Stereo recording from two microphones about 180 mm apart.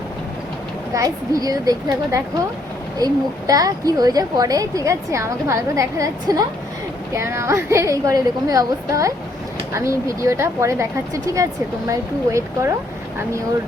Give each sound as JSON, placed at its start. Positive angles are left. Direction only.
{"t": 0.9, "sound": "a woman's voice", "side_deg": -20}